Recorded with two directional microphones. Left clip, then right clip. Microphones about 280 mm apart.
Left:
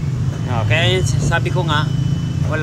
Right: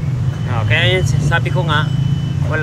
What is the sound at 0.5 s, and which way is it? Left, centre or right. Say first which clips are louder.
Speech: right 2 dB; centre.